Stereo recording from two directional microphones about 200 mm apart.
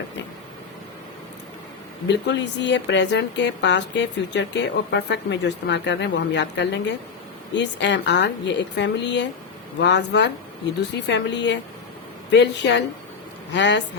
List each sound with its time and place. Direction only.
2.0 s speech: 60° left (ahead or behind)